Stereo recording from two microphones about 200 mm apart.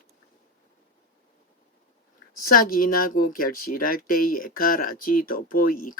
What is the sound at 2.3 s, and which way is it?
Speech, 45° left (ahead or behind).